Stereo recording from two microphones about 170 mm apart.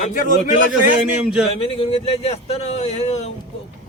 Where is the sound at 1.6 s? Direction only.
35° left (ahead or behind).